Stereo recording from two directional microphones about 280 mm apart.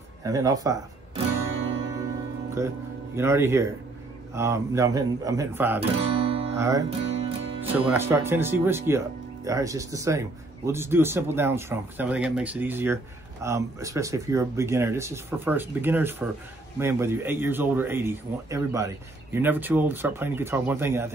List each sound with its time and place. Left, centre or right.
0.2 s speech: centre
2.6 s speech: centre
5.8 s guitar: right
6.5 s music: centre
6.9 s music: right
7.9 s speech: centre